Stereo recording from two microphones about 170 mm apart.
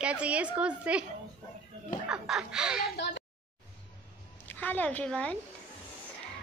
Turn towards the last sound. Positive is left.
turn(degrees=5)  # may be behind; listen again after turning